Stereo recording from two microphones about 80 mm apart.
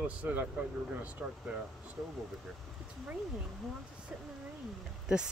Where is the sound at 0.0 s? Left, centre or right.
Centre.